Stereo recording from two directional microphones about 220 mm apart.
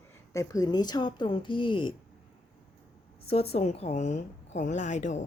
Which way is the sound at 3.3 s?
25° left (ahead or behind).